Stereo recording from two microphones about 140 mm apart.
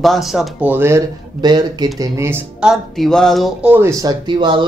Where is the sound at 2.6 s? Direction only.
Centre (ahead or behind).